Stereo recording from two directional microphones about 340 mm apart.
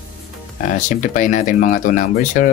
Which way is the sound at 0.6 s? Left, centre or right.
Left.